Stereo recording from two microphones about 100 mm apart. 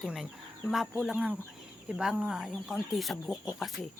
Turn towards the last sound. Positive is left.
turn(degrees=0)  # may be behind; listen again after turning